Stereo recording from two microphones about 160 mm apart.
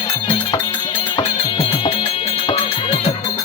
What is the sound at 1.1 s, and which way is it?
Music, 35° left (ahead or behind).